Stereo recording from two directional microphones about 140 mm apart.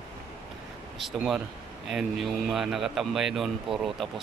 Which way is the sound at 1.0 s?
5° right (ahead or behind).